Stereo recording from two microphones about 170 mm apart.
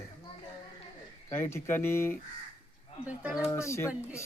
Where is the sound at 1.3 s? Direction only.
15° left (ahead or behind).